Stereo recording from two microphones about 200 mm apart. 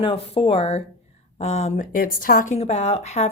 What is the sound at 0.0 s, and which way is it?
A woman's voice, 25° left (ahead or behind).